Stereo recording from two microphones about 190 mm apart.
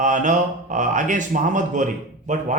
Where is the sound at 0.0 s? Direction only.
40° right (ahead or behind).